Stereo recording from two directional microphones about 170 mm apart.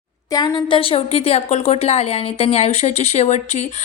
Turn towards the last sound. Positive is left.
turn(degrees=40)  # may be behind; listen again after turning